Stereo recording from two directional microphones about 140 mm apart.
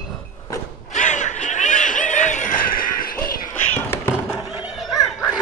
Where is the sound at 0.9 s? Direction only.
60° left (ahead or behind); by 3.3 s 90° left.